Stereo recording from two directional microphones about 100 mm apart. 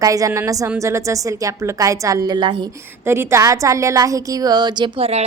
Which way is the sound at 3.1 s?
25° right (ahead or behind).